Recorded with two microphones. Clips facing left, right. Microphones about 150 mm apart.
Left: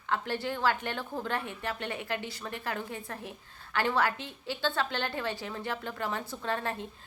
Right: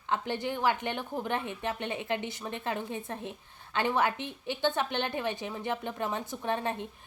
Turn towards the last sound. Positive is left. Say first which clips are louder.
# right 2 dB
turn(degrees=-20)  # may be behind; listen again after turning